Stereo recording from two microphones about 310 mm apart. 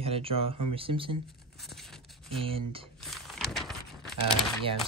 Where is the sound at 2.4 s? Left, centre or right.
Centre.